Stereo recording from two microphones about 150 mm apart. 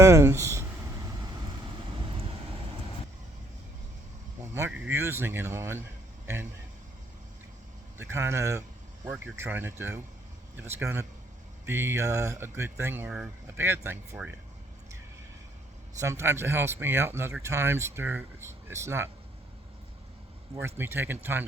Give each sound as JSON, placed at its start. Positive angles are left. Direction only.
{"t": 0.0, "sound": "a sound", "side_deg": -20}
{"t": 4.5, "sound": "speech", "side_deg": -15}
{"t": 6.2, "sound": "a sound", "side_deg": -15}
{"t": 7.9, "sound": "speech", "side_deg": -15}
{"t": 16.0, "sound": "speech", "side_deg": -20}
{"t": 20.6, "sound": "speech", "side_deg": -15}